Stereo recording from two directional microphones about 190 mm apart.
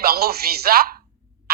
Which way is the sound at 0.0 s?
55° right (ahead or behind).